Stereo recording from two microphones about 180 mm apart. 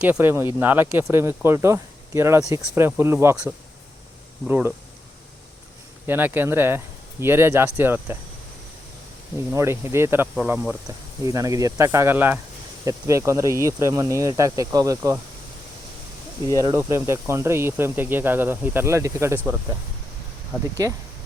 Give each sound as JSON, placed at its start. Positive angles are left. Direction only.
{"t": 0.0, "sound": "speech", "side_deg": -10}
{"t": 6.1, "sound": "speech", "side_deg": -10}
{"t": 9.5, "sound": "speech", "side_deg": -15}
{"t": 16.6, "sound": "speech", "side_deg": -15}
{"t": 20.8, "sound": "speech", "side_deg": -20}